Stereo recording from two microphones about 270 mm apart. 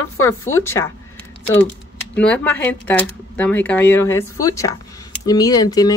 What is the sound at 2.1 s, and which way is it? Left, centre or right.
Speech, centre.